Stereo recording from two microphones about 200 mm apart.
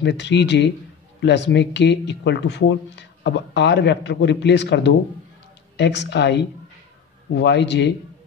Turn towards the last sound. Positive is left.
turn(degrees=60)  # may be behind; listen again after turning